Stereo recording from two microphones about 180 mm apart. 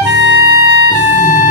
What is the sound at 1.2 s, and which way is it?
Music, 50° left (ahead or behind).